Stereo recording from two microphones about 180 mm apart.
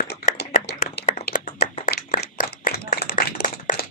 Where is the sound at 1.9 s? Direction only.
55° left (ahead or behind).